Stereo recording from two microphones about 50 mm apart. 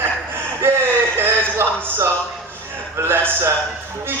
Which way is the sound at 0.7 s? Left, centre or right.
Right.